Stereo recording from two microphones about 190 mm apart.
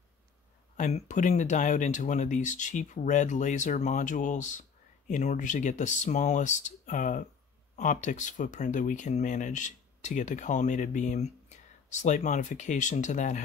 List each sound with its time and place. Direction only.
0.7 s speech: 40° left (ahead or behind)